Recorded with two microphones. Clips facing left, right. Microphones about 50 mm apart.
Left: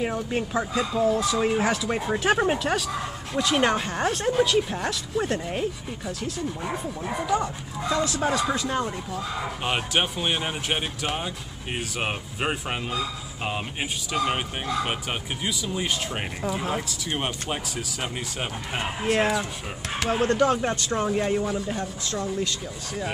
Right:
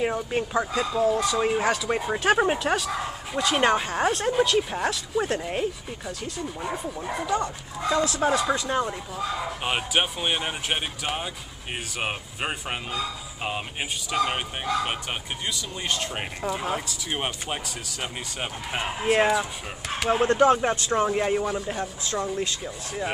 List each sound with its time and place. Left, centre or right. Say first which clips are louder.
0.0 s speech: right 1 dB; centre
20.1 s speech: right 3 dB; right; by 21.7 s centre
21.7 s speech: right 1 dB; centre